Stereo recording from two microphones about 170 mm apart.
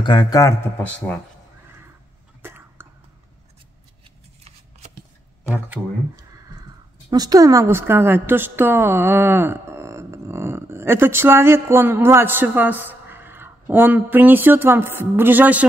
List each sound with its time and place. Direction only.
0.0 s speech: 25° left (ahead or behind)
0.8 s speech: 10° left (ahead or behind)
2.4 s a sound: 10° right (ahead or behind)
4.5 s shuffling cards: 40° right (ahead or behind)
7.1 s a woman's voice: 20° right (ahead or behind)